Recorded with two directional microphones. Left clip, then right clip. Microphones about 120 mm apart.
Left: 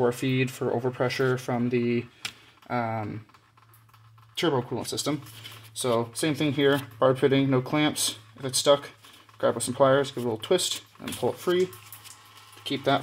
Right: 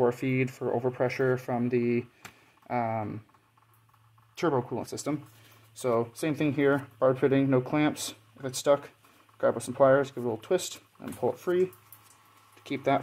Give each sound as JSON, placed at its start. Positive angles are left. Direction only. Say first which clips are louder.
{"t": 0.0, "sound": "speech", "louder": "left 1 dB", "side_deg": -20}
{"t": 4.4, "sound": "speech", "louder": "left 2 dB", "side_deg": -20}
{"t": 12.6, "sound": "speech", "louder": "left 2 dB", "side_deg": -20}